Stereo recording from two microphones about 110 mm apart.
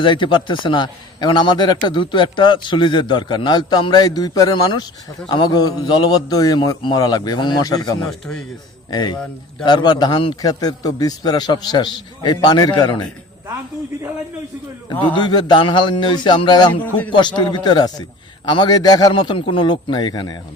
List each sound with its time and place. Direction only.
0.0 s a man's voice: 50° left (ahead or behind)
14.8 s a man's voice: 45° left (ahead or behind)